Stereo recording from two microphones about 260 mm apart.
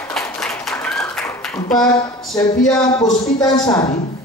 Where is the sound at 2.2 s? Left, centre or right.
Centre.